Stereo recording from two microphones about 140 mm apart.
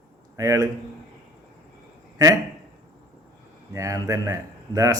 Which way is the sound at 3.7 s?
25° right (ahead or behind).